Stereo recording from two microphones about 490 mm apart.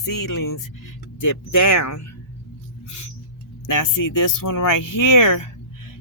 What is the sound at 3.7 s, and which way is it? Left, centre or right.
Speech, left.